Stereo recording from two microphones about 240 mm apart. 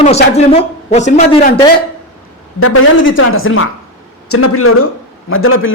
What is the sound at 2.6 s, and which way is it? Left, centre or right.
A woman's voice, left.